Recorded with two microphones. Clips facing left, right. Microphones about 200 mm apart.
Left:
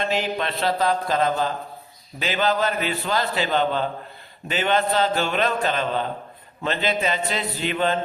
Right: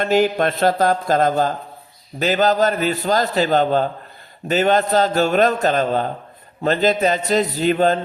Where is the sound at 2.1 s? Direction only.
40° right (ahead or behind).